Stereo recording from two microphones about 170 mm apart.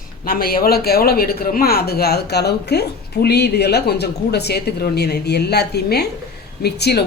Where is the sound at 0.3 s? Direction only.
60° left (ahead or behind).